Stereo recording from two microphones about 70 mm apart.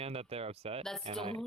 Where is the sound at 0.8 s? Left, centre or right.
Centre.